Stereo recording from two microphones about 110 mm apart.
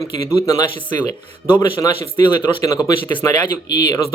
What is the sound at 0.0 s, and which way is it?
Speech, 35° left (ahead or behind).